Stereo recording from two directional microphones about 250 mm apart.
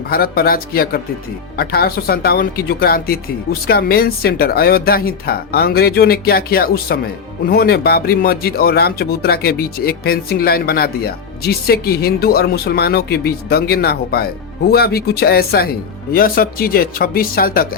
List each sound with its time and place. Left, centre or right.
0.1 s speech: left